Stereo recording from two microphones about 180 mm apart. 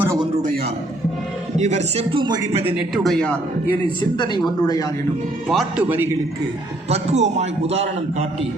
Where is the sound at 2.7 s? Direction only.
Centre (ahead or behind).